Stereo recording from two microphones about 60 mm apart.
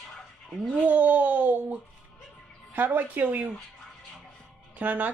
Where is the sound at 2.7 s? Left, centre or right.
Right.